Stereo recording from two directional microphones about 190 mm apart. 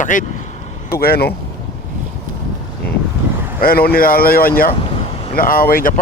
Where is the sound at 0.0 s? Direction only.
40° left (ahead or behind).